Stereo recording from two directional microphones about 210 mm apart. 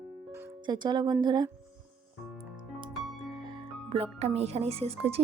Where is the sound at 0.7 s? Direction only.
20° right (ahead or behind).